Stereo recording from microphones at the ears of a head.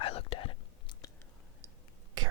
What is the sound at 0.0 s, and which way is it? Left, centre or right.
Whispering, left.